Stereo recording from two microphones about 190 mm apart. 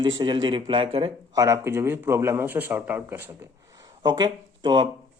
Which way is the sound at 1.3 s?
15° right (ahead or behind).